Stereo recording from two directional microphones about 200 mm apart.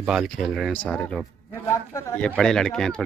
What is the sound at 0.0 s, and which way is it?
Speech, centre (ahead or behind).